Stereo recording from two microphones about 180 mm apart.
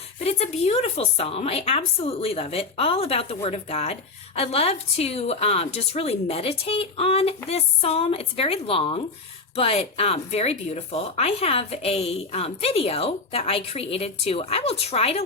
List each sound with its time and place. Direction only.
0.3 s speech: 35° left (ahead or behind)